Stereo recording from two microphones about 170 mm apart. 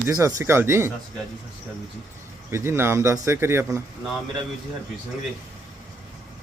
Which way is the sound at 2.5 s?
15° right (ahead or behind).